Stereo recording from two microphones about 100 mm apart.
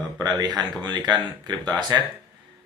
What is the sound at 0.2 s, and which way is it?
Speech, 40° right (ahead or behind).